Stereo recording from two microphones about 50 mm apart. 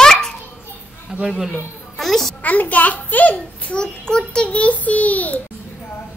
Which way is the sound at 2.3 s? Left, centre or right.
Left.